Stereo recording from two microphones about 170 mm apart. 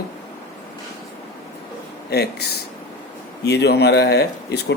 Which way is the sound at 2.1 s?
70° left (ahead or behind).